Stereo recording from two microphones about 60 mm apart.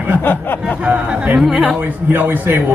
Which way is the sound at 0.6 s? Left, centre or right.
Centre.